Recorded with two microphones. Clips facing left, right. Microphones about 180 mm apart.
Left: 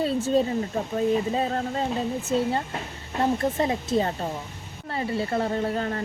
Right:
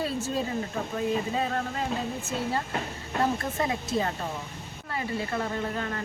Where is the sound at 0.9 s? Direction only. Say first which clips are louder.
Left 5 dB; 30° left (ahead or behind).